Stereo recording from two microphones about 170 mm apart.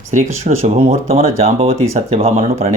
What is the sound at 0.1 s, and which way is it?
Speech, 45° right (ahead or behind).